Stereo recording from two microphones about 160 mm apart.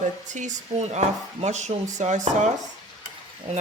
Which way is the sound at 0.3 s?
50° right (ahead or behind).